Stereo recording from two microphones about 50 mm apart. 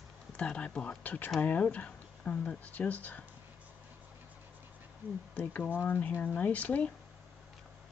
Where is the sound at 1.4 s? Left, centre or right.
Left.